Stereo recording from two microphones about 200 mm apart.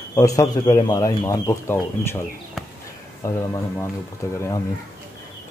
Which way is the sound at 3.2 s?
15° left (ahead or behind).